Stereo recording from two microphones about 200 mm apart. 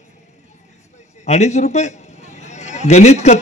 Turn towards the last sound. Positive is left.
turn(degrees=35)  # may be behind; listen again after turning